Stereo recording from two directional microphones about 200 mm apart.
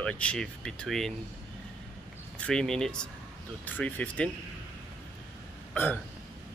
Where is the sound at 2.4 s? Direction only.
5° left (ahead or behind).